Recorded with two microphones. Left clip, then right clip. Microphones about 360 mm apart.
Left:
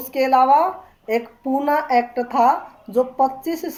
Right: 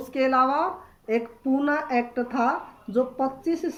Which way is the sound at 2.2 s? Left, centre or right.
Centre.